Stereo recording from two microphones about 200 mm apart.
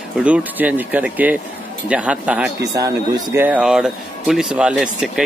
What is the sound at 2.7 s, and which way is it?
A man's voice, 15° right (ahead or behind).